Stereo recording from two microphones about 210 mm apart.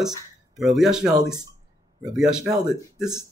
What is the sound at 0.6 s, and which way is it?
Speech, centre (ahead or behind).